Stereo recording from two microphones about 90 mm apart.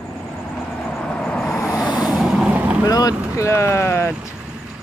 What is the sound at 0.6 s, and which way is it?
Vehicle, 5° left (ahead or behind).